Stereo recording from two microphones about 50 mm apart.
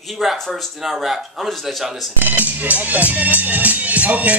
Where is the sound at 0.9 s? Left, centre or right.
Centre.